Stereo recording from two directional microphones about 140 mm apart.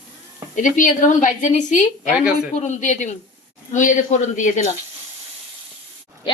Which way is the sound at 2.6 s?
60° left (ahead or behind).